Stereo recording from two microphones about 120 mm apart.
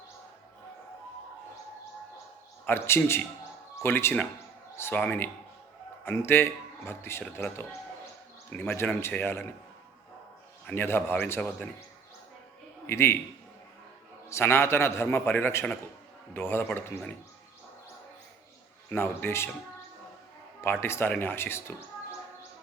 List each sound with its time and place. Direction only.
2.6 s a man's voice: 20° left (ahead or behind)
10.8 s a man's voice: 20° left (ahead or behind)
12.9 s a man's voice: 20° left (ahead or behind)
14.3 s a man's voice: 20° left (ahead or behind)
18.9 s a man's voice: 20° left (ahead or behind)
20.8 s a man's voice: 20° left (ahead or behind)